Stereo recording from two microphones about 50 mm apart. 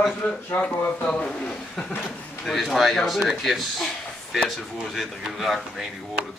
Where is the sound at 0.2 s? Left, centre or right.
Left.